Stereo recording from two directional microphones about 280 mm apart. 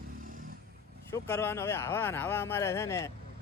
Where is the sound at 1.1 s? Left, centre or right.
Centre.